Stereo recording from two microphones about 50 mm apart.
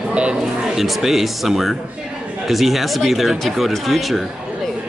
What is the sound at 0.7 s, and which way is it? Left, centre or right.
A man's voice, centre.